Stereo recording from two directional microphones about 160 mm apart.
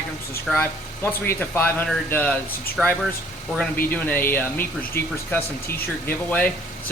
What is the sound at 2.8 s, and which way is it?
Speech, 5° right (ahead or behind).